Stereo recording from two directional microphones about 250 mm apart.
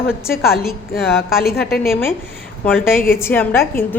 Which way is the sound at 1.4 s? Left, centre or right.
Left.